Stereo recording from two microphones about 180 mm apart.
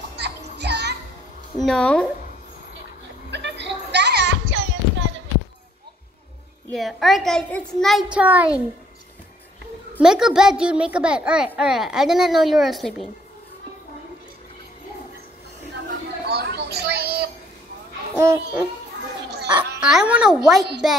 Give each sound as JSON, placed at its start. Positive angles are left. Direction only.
{"t": 0.2, "sound": "music", "side_deg": -70}
{"t": 1.6, "sound": "a child's voice", "side_deg": 5}
{"t": 3.3, "sound": "music", "side_deg": -75}
{"t": 6.7, "sound": "a child's voice", "side_deg": 0}
{"t": 9.9, "sound": "a child's voice", "side_deg": -5}
{"t": 16.3, "sound": "a sound", "side_deg": -65}
{"t": 18.1, "sound": "music", "side_deg": -15}
{"t": 19.8, "sound": "a child's voice", "side_deg": -5}